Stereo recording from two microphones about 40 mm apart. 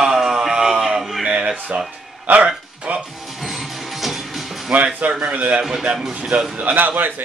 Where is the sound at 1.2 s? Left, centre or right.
Right.